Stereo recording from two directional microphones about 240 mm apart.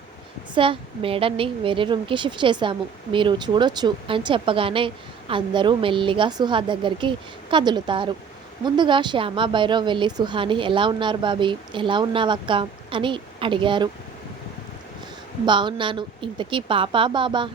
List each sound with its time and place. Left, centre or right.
0.5 s a woman's voice: right
15.4 s a woman's voice: centre